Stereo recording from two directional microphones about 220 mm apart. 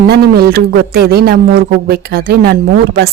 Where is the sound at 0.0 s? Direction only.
45° right (ahead or behind).